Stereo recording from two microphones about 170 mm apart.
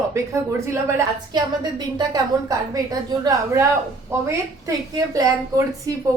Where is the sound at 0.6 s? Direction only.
15° right (ahead or behind).